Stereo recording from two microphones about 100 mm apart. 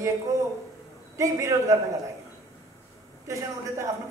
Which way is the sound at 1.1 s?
30° right (ahead or behind).